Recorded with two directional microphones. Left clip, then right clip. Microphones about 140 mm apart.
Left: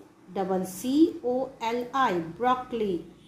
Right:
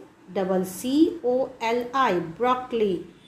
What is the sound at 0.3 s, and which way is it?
A woman's voice, 20° right (ahead or behind).